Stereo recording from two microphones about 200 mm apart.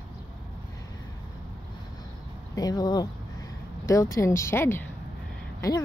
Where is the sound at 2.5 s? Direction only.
20° left (ahead or behind).